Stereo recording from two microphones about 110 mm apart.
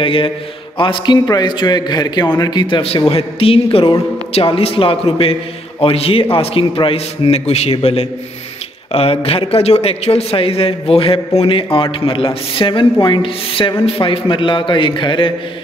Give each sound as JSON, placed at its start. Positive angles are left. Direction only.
{"t": 0.0, "sound": "a man's voice", "side_deg": 55}